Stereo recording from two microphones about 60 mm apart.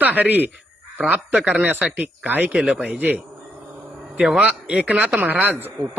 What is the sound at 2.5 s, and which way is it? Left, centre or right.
Speech, centre.